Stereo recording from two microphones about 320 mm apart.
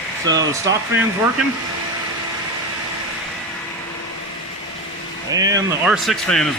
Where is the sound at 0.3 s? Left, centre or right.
Centre.